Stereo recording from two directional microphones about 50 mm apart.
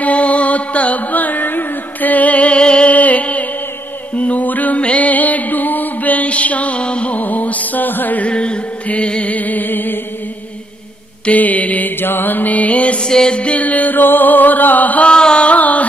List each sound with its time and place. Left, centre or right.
0.0 s music: left
7.2 s music: left
8.3 s mantra: left
11.2 s mantra: left
12.0 s music: left
15.0 s music: centre